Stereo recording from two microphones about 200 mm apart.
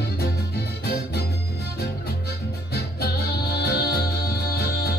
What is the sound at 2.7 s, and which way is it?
Music, 50° left (ahead or behind).